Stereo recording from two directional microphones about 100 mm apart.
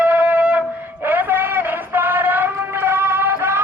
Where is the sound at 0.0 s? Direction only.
15° right (ahead or behind).